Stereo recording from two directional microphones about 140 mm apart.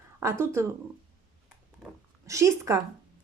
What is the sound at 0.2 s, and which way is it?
Speech, 20° right (ahead or behind).